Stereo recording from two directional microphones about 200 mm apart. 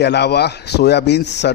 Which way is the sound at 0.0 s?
55° left (ahead or behind).